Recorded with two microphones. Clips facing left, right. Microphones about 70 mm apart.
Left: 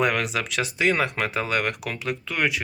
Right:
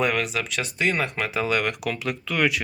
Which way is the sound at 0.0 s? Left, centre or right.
Left.